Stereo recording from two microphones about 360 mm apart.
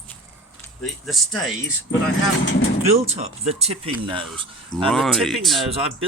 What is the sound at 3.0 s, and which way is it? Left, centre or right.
Speech, centre.